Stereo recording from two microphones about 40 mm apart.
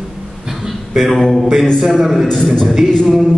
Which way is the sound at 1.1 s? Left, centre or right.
Centre.